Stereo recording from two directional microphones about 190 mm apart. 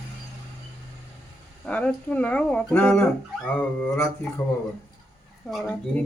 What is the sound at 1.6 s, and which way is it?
Speech, 5° left (ahead or behind).